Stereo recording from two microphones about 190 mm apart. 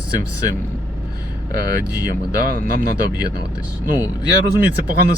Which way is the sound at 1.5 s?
55° right (ahead or behind).